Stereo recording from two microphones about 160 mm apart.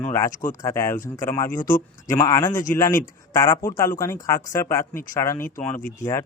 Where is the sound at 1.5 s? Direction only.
55° left (ahead or behind).